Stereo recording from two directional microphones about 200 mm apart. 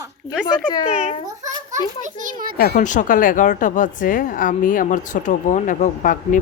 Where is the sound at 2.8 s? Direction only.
40° left (ahead or behind).